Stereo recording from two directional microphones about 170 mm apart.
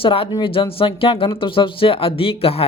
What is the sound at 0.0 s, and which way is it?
Speech, 30° left (ahead or behind).